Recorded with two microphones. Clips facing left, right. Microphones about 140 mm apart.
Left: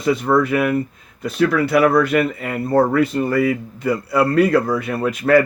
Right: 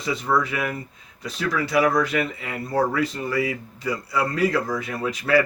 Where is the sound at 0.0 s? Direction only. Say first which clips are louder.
Left 7 dB; 55° left (ahead or behind).